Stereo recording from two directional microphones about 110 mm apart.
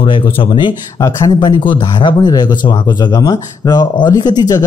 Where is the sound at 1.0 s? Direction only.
35° left (ahead or behind).